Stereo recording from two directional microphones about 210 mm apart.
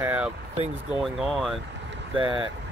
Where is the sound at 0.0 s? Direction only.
10° right (ahead or behind).